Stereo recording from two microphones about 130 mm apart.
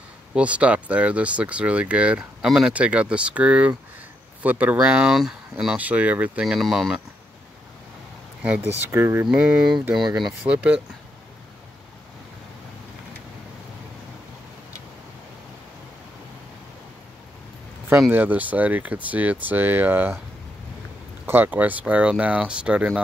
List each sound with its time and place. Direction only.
0.3 s speech: 10° right (ahead or behind)
8.4 s speech: 10° right (ahead or behind)
9.3 s speech: 5° right (ahead or behind)
18.1 s speech: 15° right (ahead or behind)
21.3 s speech: 15° right (ahead or behind)